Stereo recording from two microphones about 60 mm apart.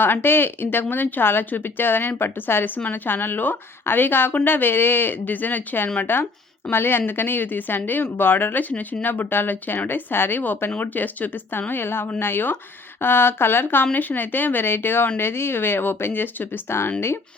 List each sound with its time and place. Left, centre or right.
0.0 s speech: left